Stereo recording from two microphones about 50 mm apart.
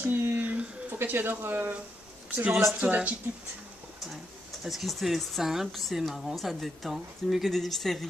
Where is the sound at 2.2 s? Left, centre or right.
Right.